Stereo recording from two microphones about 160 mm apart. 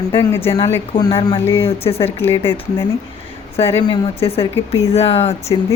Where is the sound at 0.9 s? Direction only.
35° left (ahead or behind).